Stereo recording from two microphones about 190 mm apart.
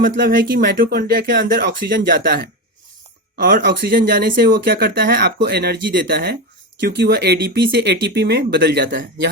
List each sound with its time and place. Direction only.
0.0 s speech: 50° right (ahead or behind)